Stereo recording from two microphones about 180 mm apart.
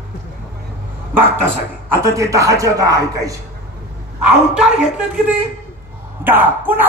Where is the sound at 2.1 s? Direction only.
15° right (ahead or behind).